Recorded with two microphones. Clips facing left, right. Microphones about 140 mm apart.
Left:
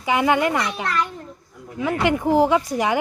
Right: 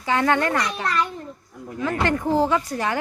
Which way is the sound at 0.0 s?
15° left (ahead or behind).